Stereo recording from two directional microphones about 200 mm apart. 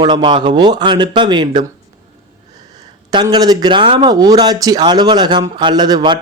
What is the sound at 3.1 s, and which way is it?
Speech, 20° right (ahead or behind).